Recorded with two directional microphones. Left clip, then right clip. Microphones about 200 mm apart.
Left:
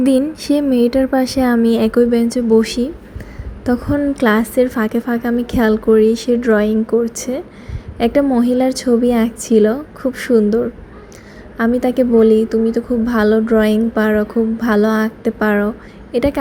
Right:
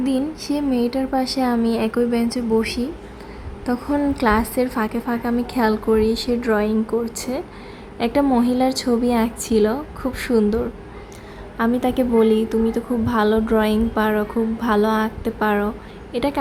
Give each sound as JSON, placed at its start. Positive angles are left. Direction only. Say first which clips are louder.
{"t": 0.0, "sound": "a woman's voice", "louder": "left 8 dB", "side_deg": 20}
{"t": 11.5, "sound": "a woman's voice", "louder": "left 5 dB", "side_deg": 10}